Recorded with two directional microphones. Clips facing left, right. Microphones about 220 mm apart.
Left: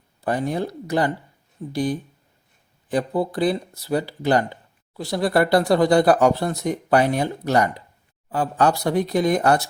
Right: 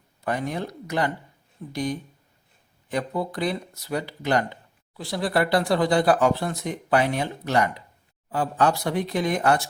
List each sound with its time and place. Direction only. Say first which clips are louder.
0.2 s speech: left 4 dB; 35° left (ahead or behind)